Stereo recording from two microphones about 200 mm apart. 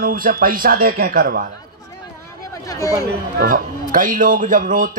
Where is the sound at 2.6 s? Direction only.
15° left (ahead or behind).